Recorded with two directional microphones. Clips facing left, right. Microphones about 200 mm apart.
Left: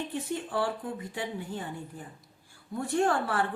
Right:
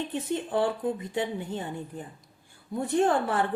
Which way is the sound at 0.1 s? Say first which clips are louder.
Right 4 dB; 20° right (ahead or behind).